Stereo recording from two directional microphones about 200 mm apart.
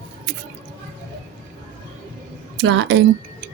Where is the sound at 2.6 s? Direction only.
65° right (ahead or behind).